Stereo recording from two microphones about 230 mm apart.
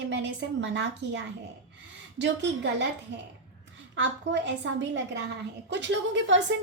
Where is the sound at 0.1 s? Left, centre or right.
Right.